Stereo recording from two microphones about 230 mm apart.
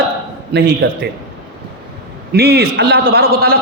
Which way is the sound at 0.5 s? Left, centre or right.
Right.